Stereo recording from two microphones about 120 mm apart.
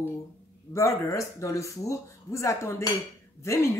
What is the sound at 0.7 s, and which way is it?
Speech, 25° left (ahead or behind).